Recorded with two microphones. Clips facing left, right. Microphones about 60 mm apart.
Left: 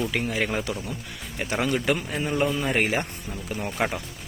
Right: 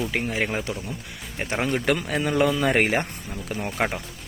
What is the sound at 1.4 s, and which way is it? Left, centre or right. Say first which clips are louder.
Speech: even; right.